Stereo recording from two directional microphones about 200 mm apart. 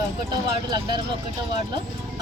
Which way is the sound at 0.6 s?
20° right (ahead or behind).